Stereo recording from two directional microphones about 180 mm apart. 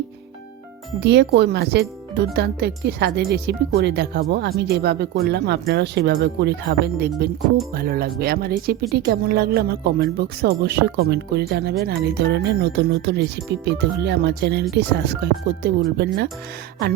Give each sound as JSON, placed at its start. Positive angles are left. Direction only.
{"t": 0.9, "sound": "speech", "side_deg": -70}
{"t": 7.7, "sound": "speech", "side_deg": -55}